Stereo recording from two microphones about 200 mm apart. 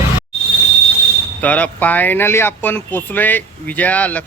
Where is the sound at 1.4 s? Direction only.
5° left (ahead or behind).